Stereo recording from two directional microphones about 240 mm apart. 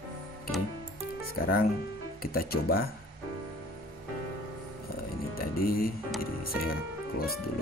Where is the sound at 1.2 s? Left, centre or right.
Left.